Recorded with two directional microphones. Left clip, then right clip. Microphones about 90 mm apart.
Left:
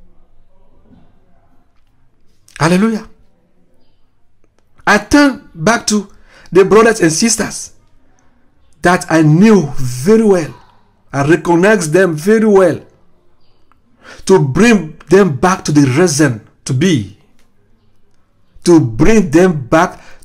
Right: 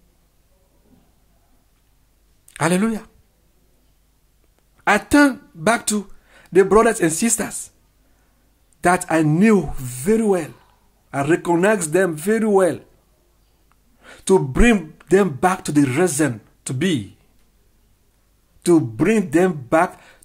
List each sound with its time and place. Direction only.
2.5 s speech: 35° right (ahead or behind)
4.7 s speech: 35° right (ahead or behind)
8.8 s speech: 35° right (ahead or behind)
13.9 s speech: 35° right (ahead or behind)
18.9 s a man's voice: 30° right (ahead or behind)